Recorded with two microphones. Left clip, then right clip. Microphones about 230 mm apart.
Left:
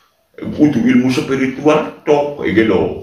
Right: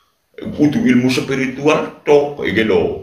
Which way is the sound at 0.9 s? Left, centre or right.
Right.